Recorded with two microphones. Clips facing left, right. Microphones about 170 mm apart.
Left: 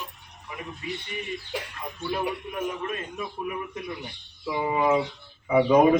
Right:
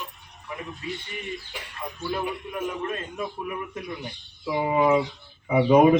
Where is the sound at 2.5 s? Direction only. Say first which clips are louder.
Right 2 dB; centre (ahead or behind).